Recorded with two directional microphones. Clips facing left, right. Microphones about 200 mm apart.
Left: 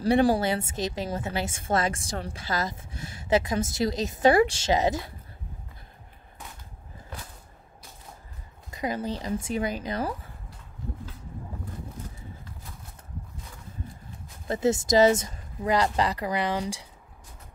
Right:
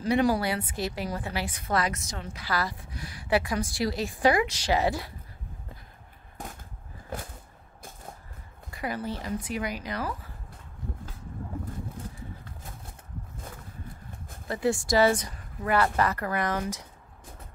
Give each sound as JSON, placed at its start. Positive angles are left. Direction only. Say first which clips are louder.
{"t": 0.0, "sound": "a woman's voice", "louder": "left 3 dB", "side_deg": 30}
{"t": 2.4, "sound": "a woman's voice", "louder": "right 2 dB", "side_deg": 20}
{"t": 8.6, "sound": "a woman's voice", "louder": "left 3 dB", "side_deg": 20}
{"t": 14.5, "sound": "speech", "louder": "left 3 dB", "side_deg": 20}